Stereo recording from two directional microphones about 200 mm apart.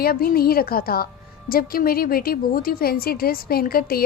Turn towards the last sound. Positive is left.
turn(degrees=50)  # may be behind; listen again after turning